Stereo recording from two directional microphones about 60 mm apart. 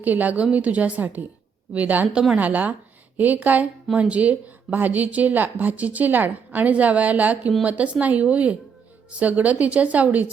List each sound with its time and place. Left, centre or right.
0.0 s a woman's voice: right